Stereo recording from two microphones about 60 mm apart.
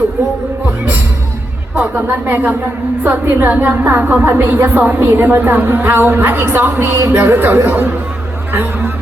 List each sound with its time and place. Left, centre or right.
1.8 s a woman's voice: right
3.4 s a woman's voice: right